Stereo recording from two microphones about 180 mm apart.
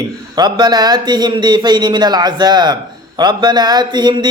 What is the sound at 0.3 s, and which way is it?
Speech, 25° right (ahead or behind).